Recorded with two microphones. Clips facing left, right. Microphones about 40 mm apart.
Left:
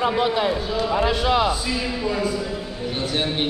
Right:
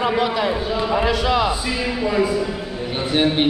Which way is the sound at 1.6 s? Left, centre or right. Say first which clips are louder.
Right 3 dB; centre.